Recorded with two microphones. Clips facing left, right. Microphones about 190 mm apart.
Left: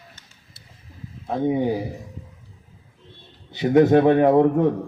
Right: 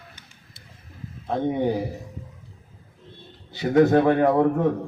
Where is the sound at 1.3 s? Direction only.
5° left (ahead or behind).